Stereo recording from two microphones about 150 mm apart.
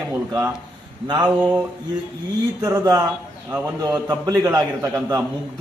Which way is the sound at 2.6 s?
25° right (ahead or behind).